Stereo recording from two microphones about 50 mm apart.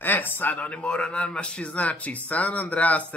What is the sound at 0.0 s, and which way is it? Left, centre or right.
A man's voice, left.